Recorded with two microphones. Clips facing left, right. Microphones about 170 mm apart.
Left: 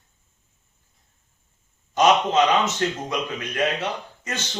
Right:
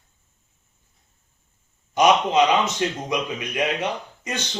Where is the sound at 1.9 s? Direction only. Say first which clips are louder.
Right 1 dB; 15° right (ahead or behind).